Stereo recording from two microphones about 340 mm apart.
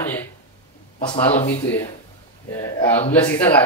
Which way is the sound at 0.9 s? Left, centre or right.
Centre.